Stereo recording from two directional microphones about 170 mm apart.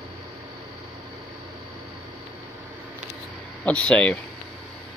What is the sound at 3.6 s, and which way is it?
Speech, 5° left (ahead or behind).